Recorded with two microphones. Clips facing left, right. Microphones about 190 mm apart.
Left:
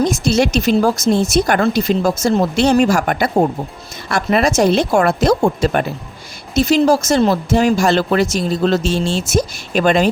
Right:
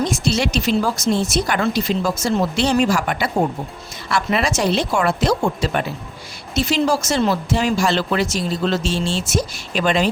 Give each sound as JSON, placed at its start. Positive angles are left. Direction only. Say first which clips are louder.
{"t": 0.0, "sound": "speech", "louder": "left 5 dB", "side_deg": 45}